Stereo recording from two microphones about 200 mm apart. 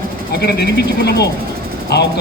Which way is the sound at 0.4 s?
55° left (ahead or behind).